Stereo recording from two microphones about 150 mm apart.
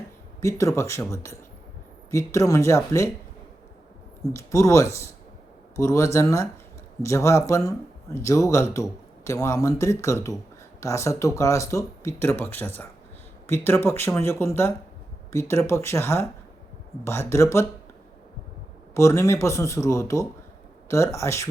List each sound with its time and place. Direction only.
0.4 s speech: 20° left (ahead or behind)
4.3 s speech: 20° left (ahead or behind)
18.9 s speech: 20° left (ahead or behind)